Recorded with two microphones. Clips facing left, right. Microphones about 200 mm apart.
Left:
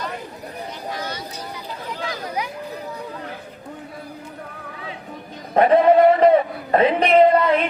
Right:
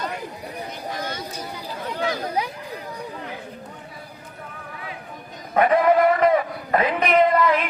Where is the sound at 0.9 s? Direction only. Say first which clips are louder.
Right 1 dB; 50° right (ahead or behind).